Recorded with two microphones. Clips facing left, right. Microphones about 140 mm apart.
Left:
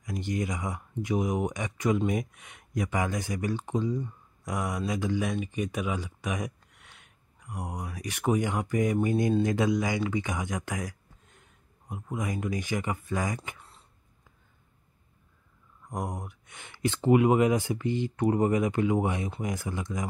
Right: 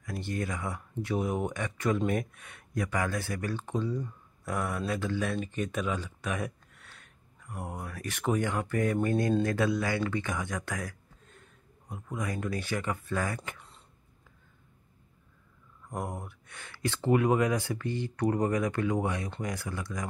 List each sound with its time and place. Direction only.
0.0 s speech: 15° left (ahead or behind)
13.5 s throat clearing: centre (ahead or behind)
15.9 s speech: 15° left (ahead or behind)